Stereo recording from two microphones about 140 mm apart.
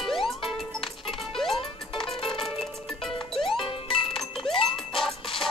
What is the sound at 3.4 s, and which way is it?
Music, 35° left (ahead or behind).